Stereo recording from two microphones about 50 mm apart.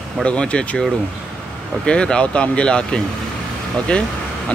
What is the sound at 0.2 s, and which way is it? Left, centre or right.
Speech, left.